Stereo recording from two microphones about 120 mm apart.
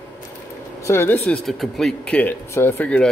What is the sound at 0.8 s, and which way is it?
Speech, 20° left (ahead or behind).